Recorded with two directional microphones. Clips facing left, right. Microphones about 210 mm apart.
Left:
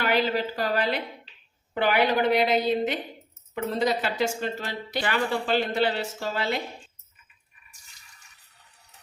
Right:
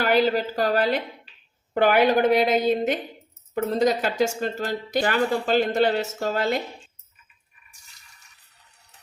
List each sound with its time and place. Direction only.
0.1 s a woman's voice: 45° right (ahead or behind)